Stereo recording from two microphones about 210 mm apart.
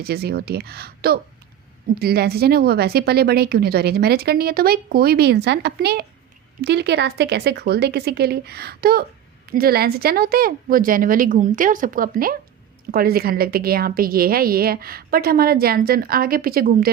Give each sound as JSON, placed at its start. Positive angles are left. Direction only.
{"t": 0.0, "sound": "speech", "side_deg": -50}